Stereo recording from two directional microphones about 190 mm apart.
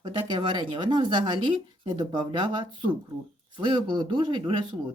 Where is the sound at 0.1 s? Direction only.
25° right (ahead or behind).